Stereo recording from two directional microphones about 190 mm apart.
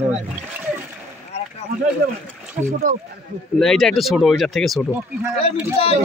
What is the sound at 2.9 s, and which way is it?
Speech, 45° right (ahead or behind).